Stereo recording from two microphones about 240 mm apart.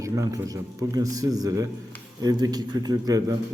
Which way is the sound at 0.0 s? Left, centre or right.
Centre.